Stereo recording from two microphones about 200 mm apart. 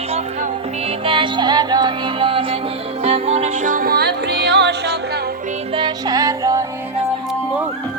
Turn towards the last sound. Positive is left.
turn(degrees=-15)  # may be behind; listen again after turning